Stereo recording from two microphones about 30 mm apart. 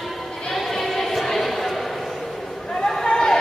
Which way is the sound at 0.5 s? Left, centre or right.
Centre.